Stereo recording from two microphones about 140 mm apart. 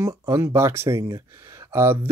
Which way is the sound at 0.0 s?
20° right (ahead or behind).